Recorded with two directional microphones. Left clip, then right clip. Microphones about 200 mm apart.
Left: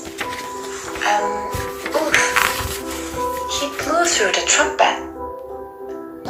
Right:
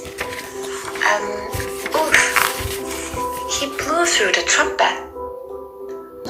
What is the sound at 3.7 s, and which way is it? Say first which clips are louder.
Speech: even; 20° right (ahead or behind).